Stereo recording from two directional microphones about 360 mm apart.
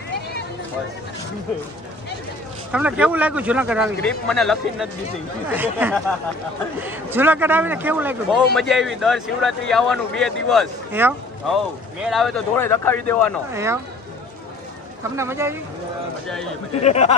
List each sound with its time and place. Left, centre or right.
2.7 s a man's voice: centre
13.5 s speech: centre
15.1 s speech: centre
16.8 s a sound: centre